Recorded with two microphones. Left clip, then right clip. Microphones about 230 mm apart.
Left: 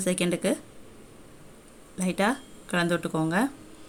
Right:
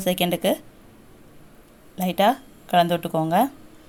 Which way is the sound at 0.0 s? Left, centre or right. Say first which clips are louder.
Right 5 dB; centre.